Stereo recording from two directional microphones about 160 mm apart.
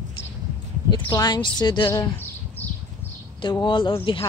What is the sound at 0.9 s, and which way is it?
Speech, 30° left (ahead or behind).